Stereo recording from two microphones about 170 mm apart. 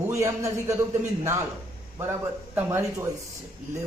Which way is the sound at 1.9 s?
15° right (ahead or behind).